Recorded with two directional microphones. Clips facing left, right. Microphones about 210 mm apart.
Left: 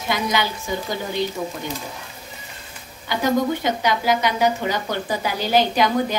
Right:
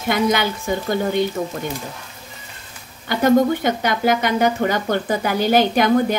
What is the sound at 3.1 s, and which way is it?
Speech, 50° right (ahead or behind).